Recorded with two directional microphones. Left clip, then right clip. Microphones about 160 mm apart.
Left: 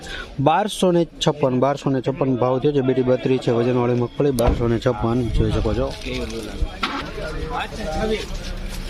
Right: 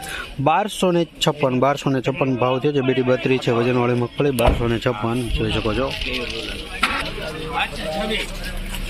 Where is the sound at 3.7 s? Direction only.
Centre (ahead or behind).